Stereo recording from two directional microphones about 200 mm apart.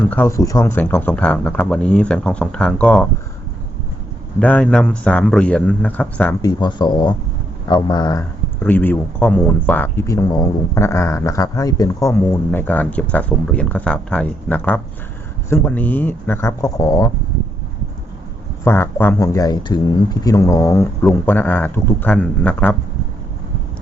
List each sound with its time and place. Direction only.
0.0 s speech: 10° left (ahead or behind)
4.4 s speech: 5° left (ahead or behind)
6.4 s speech: 20° left (ahead or behind)
8.6 s speech: 10° left (ahead or behind)
18.6 s speech: 10° left (ahead or behind)